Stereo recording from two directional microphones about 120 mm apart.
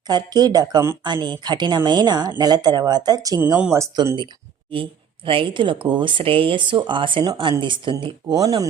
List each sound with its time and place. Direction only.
0.1 s a woman's voice: 35° right (ahead or behind)
3.4 s speech: 20° right (ahead or behind)
3.9 s a woman's voice: 40° right (ahead or behind)